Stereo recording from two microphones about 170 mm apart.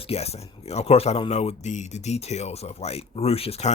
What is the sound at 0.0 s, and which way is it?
Speech, 35° left (ahead or behind).